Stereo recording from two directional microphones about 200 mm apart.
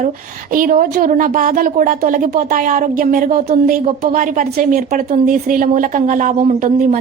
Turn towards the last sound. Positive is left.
turn(degrees=-40)  # may be behind; listen again after turning